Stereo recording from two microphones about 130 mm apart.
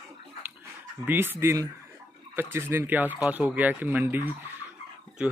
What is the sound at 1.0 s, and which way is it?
Speech, 15° right (ahead or behind).